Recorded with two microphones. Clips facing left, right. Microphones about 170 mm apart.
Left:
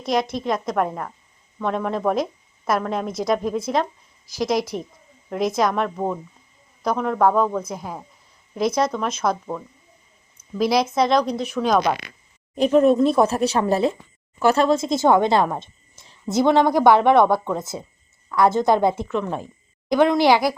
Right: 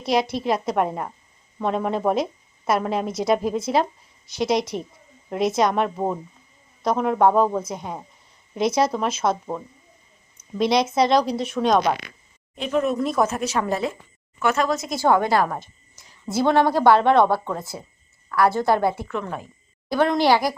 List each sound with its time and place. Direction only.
0.0 s a woman's voice: 5° right (ahead or behind)
2.0 s a sound: centre (ahead or behind)
2.9 s a woman's voice: 5° right (ahead or behind)
10.6 s a woman's voice: centre (ahead or behind)
12.5 s speech: 35° left (ahead or behind)
16.4 s a woman's voice: 15° left (ahead or behind)